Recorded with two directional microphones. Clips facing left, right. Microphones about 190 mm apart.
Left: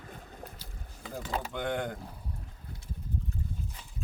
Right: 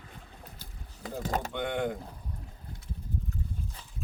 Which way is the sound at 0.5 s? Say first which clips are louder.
Left 1 dB; 50° right (ahead or behind).